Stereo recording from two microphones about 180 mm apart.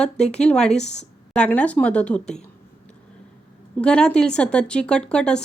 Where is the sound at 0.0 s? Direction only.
5° left (ahead or behind).